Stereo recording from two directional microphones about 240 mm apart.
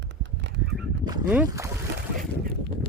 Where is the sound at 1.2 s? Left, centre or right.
Centre.